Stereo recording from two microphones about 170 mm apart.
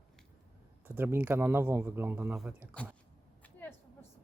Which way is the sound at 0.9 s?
10° right (ahead or behind).